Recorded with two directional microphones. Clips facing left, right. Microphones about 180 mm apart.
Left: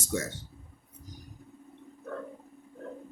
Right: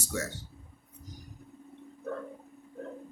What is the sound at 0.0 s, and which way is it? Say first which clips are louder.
Speech: left 3 dB; 25° left (ahead or behind).